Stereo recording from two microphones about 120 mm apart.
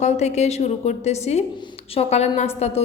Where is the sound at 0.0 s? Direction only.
70° left (ahead or behind).